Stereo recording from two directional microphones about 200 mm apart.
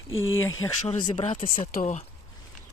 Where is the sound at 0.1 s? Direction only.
80° left.